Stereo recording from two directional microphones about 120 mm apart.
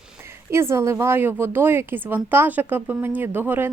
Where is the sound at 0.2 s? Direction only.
20° right (ahead or behind).